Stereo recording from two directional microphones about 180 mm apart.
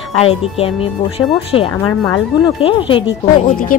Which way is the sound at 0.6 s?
30° left (ahead or behind).